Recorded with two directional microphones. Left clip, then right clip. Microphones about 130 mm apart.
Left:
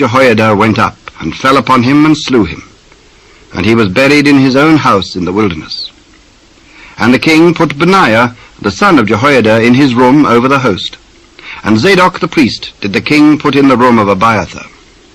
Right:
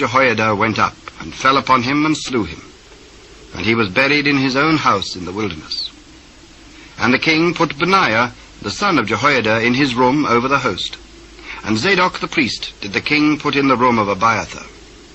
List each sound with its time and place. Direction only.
0.0 s speech: 30° left (ahead or behind)
6.9 s speech: 30° left (ahead or behind)